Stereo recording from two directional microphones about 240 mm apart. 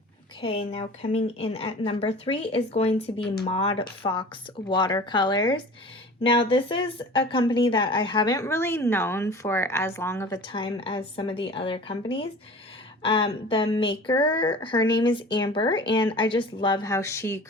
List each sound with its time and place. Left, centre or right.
0.4 s speech: left